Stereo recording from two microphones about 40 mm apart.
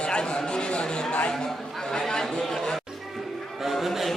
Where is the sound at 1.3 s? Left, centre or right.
Centre.